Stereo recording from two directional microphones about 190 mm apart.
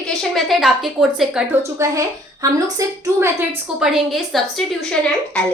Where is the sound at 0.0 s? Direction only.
Centre (ahead or behind).